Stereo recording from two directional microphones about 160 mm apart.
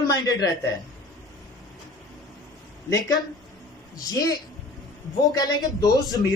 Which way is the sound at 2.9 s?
20° left (ahead or behind).